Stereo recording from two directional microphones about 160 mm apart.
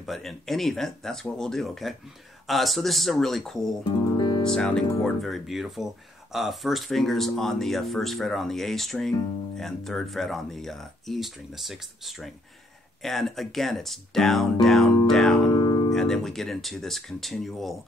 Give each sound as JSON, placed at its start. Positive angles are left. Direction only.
{"t": 0.0, "sound": "speech", "side_deg": 0}
{"t": 4.2, "sound": "music", "side_deg": 30}
{"t": 4.6, "sound": "speech", "side_deg": 5}
{"t": 15.5, "sound": "music", "side_deg": 25}
{"t": 15.9, "sound": "speech", "side_deg": 5}